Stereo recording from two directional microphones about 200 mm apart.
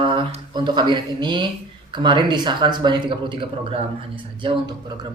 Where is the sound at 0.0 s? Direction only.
25° right (ahead or behind).